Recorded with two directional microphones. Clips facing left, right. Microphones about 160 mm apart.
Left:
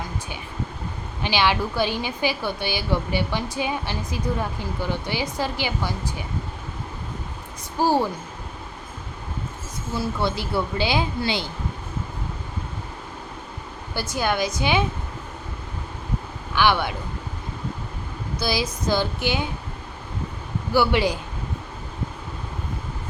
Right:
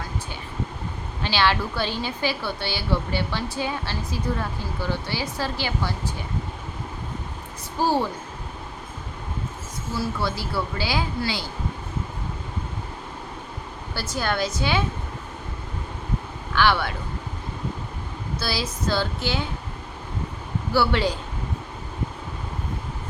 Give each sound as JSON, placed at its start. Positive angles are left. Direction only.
{"t": 1.2, "sound": "a woman's voice", "side_deg": 15}
{"t": 7.8, "sound": "a woman's voice", "side_deg": 10}
{"t": 10.0, "sound": "speech", "side_deg": 20}
{"t": 13.9, "sound": "a woman's voice", "side_deg": 15}
{"t": 16.6, "sound": "a woman's voice", "side_deg": 15}
{"t": 18.3, "sound": "a woman's voice", "side_deg": 15}
{"t": 20.7, "sound": "a woman's voice", "side_deg": 15}